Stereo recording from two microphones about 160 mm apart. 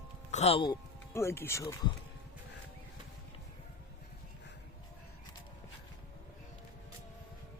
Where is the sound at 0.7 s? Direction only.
15° left (ahead or behind).